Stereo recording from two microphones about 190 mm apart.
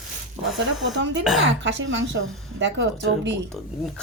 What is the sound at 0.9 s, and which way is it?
A woman's voice, 70° right (ahead or behind).